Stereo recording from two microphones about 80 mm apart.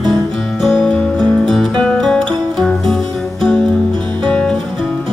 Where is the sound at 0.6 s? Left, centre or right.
Centre.